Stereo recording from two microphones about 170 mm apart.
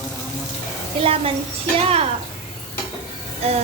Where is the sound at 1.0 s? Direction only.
35° right (ahead or behind).